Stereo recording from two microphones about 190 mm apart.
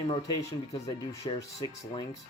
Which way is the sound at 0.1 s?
20° left (ahead or behind).